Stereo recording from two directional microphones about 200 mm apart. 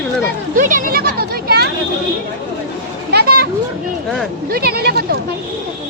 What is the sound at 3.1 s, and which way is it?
Children playing, 50° right (ahead or behind).